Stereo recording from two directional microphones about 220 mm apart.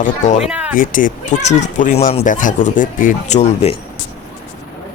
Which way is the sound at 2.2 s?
35° left (ahead or behind).